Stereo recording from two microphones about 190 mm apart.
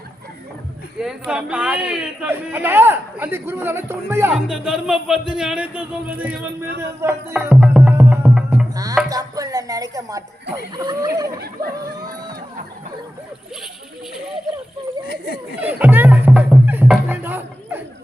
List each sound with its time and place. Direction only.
0.9 s speech: 5° right (ahead or behind)
4.4 s speech: 5° right (ahead or behind)
7.0 s music: 10° right (ahead or behind)
9.0 s a sound: 20° right (ahead or behind)
10.8 s speech: 20° right (ahead or behind)
15.0 s speech: 55° left (ahead or behind)
15.6 s music: 10° right (ahead or behind)